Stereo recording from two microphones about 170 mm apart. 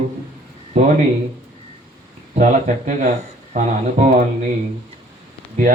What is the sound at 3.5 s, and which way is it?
Speech, 45° right (ahead or behind).